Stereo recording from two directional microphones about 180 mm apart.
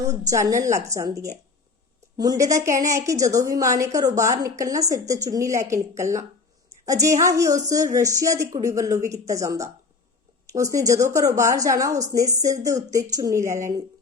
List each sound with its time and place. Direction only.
0.3 s a woman's voice: 20° right (ahead or behind)